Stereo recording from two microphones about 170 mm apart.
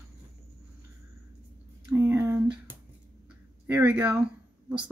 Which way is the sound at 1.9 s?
15° right (ahead or behind).